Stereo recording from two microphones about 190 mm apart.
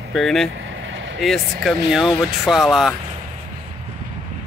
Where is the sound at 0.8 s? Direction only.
80° right.